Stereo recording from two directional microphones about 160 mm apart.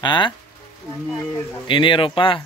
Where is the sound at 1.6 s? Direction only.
30° left (ahead or behind).